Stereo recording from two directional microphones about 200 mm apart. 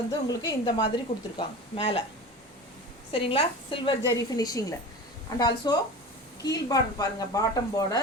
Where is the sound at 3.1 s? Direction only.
25° left (ahead or behind).